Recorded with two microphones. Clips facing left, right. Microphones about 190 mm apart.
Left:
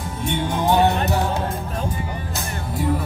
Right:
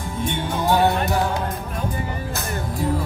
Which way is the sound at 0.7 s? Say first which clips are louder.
Even; 20° left (ahead or behind).